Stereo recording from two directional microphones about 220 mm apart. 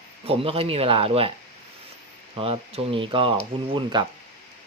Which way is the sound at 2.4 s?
25° right (ahead or behind).